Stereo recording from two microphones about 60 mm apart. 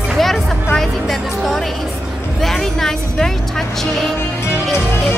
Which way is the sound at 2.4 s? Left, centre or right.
Centre.